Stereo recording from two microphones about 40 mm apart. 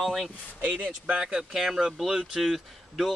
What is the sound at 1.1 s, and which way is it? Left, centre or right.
Speech, centre.